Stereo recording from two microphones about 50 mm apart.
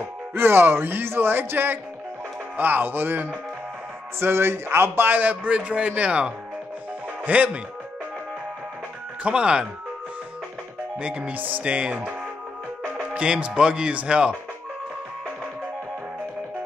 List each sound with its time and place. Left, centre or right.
0.3 s a man's voice: right
9.2 s speech: right
11.0 s speech: right